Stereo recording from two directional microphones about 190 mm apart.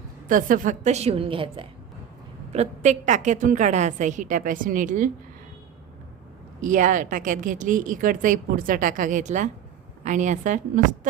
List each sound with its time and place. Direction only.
0.3 s a woman's voice: 45° right (ahead or behind)
6.6 s a woman's voice: 40° right (ahead or behind)